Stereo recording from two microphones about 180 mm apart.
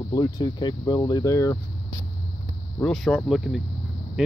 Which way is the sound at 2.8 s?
5° left (ahead or behind).